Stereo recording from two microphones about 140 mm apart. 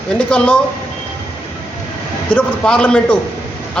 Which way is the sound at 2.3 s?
10° left (ahead or behind).